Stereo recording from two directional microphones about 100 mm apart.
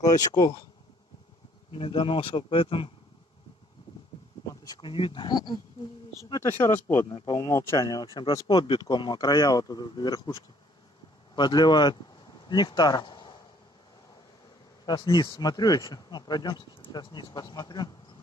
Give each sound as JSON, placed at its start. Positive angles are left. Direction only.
{"t": 0.0, "sound": "speech", "side_deg": 40}
{"t": 1.7, "sound": "speech", "side_deg": 65}
{"t": 4.8, "sound": "speech", "side_deg": 60}
{"t": 6.4, "sound": "speech", "side_deg": 25}
{"t": 7.2, "sound": "speech", "side_deg": 40}
{"t": 11.3, "sound": "speech", "side_deg": 45}
{"t": 15.3, "sound": "speech", "side_deg": 45}